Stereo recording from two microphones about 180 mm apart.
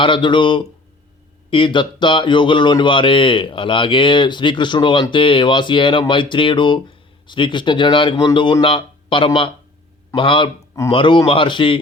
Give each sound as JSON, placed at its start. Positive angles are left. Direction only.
{"t": 0.0, "sound": "a man's voice", "side_deg": 25}